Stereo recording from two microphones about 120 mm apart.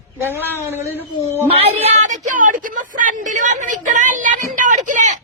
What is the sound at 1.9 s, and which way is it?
Speech, 90° right.